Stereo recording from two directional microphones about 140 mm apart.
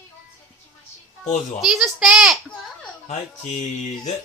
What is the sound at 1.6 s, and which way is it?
Speech, centre (ahead or behind).